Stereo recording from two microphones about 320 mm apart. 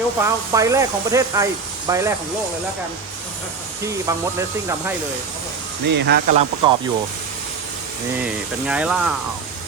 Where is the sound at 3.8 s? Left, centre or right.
Centre.